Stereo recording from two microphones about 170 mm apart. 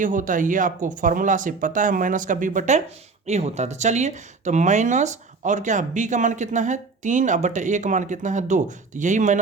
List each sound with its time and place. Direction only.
0.0 s speech: 50° right (ahead or behind)